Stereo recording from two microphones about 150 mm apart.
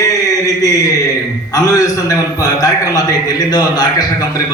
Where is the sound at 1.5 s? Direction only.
25° left (ahead or behind).